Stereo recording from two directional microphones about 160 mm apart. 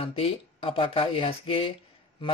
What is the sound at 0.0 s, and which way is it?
Speech, 35° left (ahead or behind).